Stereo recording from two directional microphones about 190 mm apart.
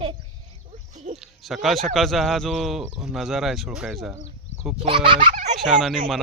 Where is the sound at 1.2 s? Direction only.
Centre (ahead or behind).